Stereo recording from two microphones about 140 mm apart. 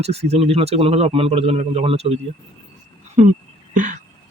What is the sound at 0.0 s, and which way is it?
A man's voice, 50° right (ahead or behind).